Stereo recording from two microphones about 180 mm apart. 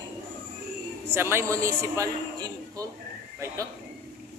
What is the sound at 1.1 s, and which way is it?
A man's voice, 15° right (ahead or behind).